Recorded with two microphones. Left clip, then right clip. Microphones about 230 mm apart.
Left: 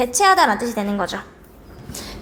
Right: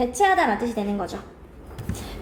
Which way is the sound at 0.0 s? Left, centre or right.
Left.